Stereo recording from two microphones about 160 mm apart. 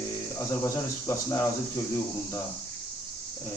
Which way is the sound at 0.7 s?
15° left (ahead or behind).